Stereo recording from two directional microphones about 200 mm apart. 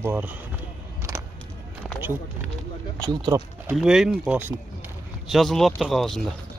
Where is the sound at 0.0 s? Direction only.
10° right (ahead or behind).